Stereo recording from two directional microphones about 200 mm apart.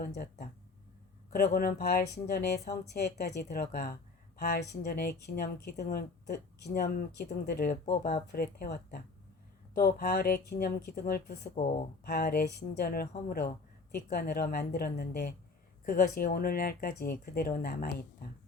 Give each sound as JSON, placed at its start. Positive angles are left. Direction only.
{"t": 0.0, "sound": "a woman's voice", "side_deg": 45}
{"t": 11.6, "sound": "speech", "side_deg": 35}
{"t": 12.0, "sound": "speech", "side_deg": 50}